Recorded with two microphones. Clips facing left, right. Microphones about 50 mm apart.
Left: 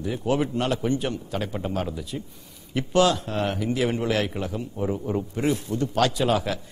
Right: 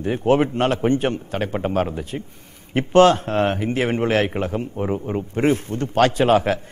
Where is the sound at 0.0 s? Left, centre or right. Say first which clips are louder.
Right 7 dB; right.